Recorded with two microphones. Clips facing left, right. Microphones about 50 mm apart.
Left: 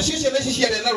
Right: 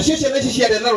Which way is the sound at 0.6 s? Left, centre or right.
Right.